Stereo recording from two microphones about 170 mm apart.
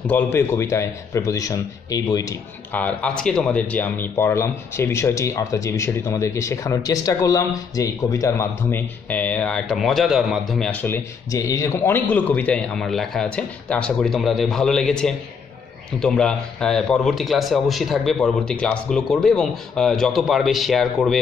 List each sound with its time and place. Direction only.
0.0 s a man's voice: 10° left (ahead or behind)
2.7 s a man's voice: 10° left (ahead or behind)